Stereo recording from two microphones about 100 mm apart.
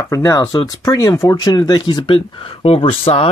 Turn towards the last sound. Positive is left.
turn(degrees=70)  # may be behind; listen again after turning